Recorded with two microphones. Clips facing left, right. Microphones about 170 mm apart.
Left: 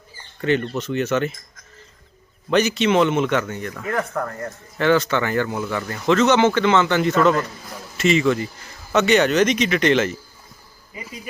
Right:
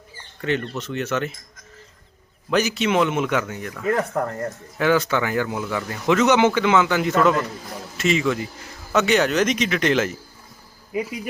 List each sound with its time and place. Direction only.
0.4 s a man's voice: centre (ahead or behind)
2.5 s a man's voice: 5° right (ahead or behind)
3.9 s speech: 25° right (ahead or behind)
4.8 s a man's voice: 5° right (ahead or behind)
10.9 s speech: 75° right (ahead or behind)